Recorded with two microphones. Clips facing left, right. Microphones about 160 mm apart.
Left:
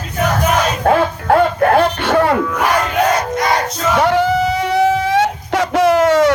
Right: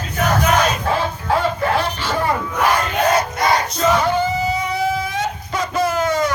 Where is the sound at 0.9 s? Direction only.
60° left (ahead or behind).